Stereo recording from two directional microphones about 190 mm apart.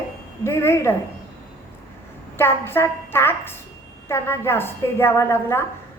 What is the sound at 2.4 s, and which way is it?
A woman's voice, 10° left (ahead or behind).